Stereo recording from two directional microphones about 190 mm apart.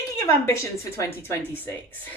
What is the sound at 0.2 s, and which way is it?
Speech, 15° left (ahead or behind).